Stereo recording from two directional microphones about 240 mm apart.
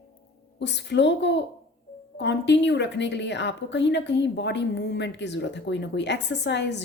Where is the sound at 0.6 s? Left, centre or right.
Left.